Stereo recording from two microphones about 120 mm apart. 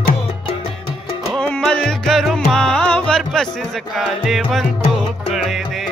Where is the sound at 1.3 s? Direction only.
5° left (ahead or behind).